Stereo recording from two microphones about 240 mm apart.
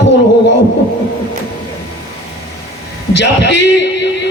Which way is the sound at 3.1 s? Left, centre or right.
Left.